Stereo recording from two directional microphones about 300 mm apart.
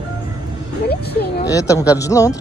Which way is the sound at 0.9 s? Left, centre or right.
Left.